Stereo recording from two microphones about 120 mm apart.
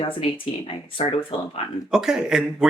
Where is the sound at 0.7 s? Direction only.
50° left (ahead or behind).